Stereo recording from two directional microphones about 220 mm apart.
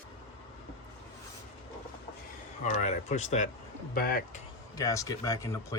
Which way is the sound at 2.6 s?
35° left (ahead or behind).